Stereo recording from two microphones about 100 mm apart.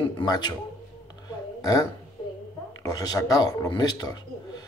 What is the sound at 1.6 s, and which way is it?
Speech, 35° left (ahead or behind).